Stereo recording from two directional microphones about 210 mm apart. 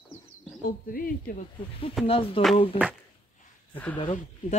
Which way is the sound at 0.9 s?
45° left (ahead or behind).